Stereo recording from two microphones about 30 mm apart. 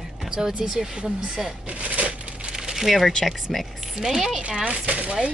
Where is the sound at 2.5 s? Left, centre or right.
Centre.